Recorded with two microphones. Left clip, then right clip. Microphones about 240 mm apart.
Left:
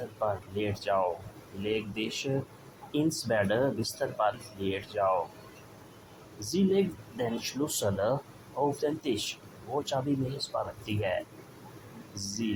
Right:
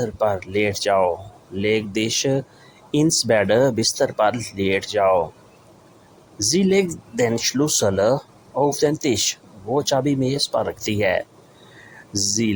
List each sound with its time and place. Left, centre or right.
0.2 s speech: right
6.4 s speech: right
12.1 s speech: right